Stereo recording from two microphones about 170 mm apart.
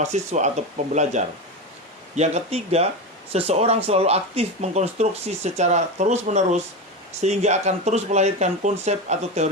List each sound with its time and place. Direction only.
0.0 s speech: 45° right (ahead or behind)